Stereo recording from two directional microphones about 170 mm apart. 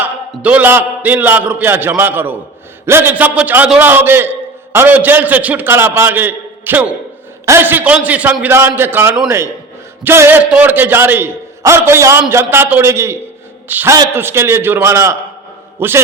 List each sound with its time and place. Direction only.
0.0 s a man's voice: 10° right (ahead or behind)